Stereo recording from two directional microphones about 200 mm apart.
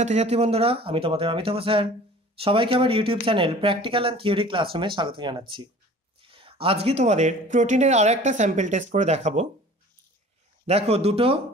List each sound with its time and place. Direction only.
0.0 s speech: 35° right (ahead or behind)
10.7 s speech: 30° right (ahead or behind)